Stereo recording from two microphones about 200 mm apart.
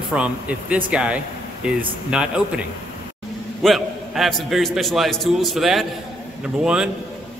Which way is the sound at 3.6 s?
Centre (ahead or behind).